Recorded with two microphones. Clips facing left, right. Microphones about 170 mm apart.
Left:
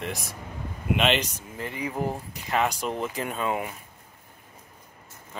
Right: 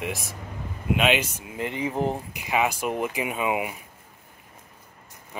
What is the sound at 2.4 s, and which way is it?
Speech, 10° right (ahead or behind).